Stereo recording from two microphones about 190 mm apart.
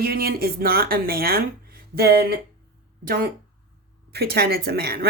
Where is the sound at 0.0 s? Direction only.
55° right (ahead or behind).